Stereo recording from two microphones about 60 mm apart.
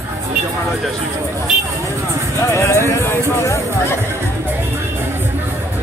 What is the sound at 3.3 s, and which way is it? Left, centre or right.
Speech, left.